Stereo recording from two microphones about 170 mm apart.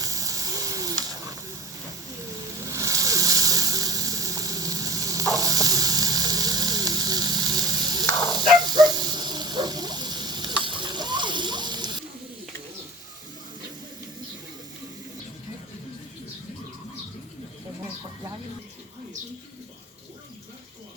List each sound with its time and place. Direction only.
0.0 s sizzle: 20° right (ahead or behind)
2.6 s a sound: 20° right (ahead or behind)
8.6 s snake: 25° right (ahead or behind)